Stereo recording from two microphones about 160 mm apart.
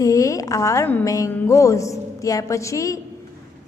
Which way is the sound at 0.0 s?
20° left (ahead or behind).